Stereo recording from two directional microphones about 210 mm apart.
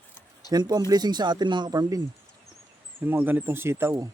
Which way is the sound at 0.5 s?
20° right (ahead or behind).